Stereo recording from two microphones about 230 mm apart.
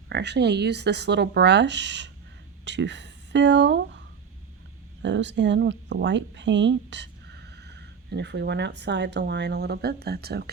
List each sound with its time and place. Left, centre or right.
0.1 s speech: right
5.0 s speech: right